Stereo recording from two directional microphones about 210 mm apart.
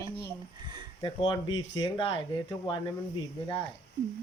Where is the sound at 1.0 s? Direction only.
20° left (ahead or behind).